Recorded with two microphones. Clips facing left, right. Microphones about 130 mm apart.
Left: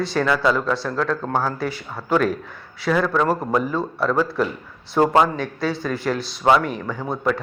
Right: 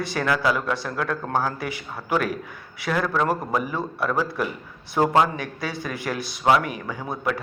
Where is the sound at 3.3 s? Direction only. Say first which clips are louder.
Left 4 dB; 10° right (ahead or behind).